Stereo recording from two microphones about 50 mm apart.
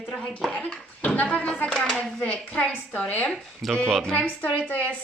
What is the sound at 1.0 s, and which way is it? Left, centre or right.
Speech, left.